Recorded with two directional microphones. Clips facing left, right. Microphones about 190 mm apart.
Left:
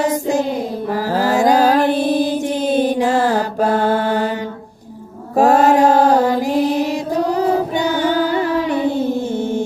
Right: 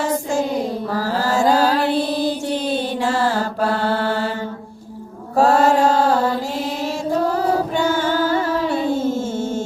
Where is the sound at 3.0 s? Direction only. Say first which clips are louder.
Left 4 dB; 15° left (ahead or behind).